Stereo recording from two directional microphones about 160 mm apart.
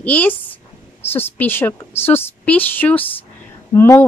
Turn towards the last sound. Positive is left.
turn(degrees=15)  # may be behind; listen again after turning